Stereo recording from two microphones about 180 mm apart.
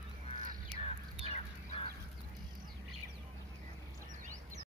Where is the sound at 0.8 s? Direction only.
35° left (ahead or behind).